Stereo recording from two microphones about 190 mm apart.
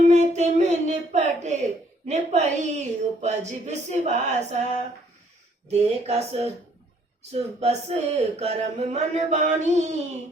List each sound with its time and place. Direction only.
0.1 s speech: 35° right (ahead or behind)